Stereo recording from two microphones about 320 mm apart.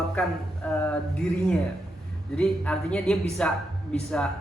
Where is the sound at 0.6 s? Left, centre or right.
Centre.